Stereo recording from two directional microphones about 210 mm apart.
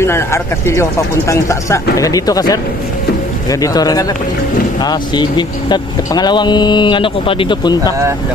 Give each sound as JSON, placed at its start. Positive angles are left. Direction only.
{"t": 0.0, "sound": "speech", "side_deg": 10}